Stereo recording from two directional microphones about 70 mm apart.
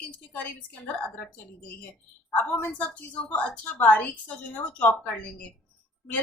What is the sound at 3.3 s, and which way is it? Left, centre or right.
A woman's voice, centre.